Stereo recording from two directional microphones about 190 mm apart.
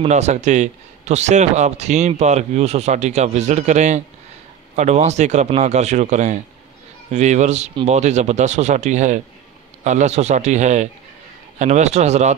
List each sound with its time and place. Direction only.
0.0 s a man's voice: 35° right (ahead or behind)